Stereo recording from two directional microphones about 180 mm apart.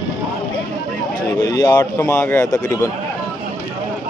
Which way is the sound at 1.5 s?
20° left (ahead or behind).